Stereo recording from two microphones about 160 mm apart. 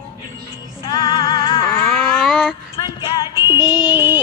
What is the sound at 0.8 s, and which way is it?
Music, 30° left (ahead or behind).